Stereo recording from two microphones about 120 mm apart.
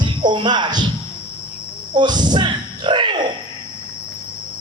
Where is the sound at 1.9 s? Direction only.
40° right (ahead or behind).